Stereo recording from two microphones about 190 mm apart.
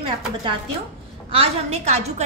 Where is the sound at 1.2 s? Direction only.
30° right (ahead or behind).